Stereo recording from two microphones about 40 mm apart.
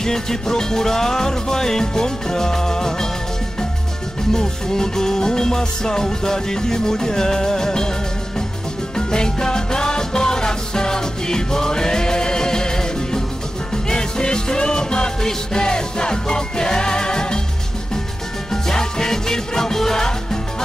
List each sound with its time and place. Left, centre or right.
0.0 s music: centre
4.3 s music: centre
8.9 s music: centre
18.5 s music: centre